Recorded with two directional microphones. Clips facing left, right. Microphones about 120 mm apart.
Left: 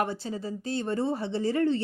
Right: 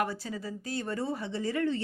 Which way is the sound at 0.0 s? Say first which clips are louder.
Left 3 dB; 25° left (ahead or behind).